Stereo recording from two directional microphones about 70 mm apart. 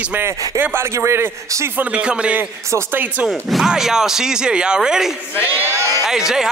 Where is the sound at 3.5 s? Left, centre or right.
Centre.